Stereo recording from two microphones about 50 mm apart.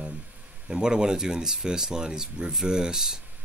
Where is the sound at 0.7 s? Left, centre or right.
Centre.